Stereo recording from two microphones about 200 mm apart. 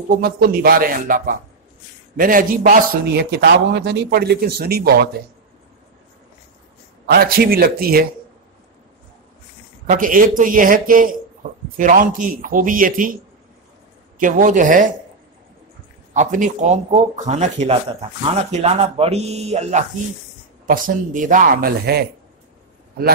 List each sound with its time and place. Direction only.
0.1 s a man's voice: 45° right (ahead or behind)
7.1 s a man's voice: 50° right (ahead or behind)
9.8 s a man's voice: 45° right (ahead or behind)
16.1 s speech: 40° right (ahead or behind)
20.6 s a man's voice: 45° right (ahead or behind)